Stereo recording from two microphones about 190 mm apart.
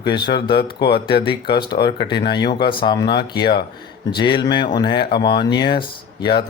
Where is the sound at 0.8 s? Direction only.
55° left (ahead or behind).